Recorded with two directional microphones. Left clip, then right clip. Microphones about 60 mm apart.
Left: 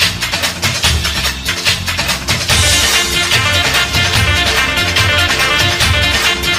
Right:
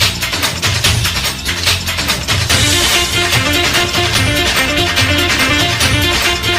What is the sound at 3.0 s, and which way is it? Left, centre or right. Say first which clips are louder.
Music: left 1 dB; left.